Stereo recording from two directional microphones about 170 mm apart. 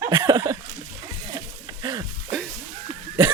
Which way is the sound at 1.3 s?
25° right (ahead or behind).